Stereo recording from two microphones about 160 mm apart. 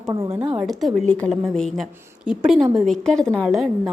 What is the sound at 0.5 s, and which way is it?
A woman's voice, centre (ahead or behind).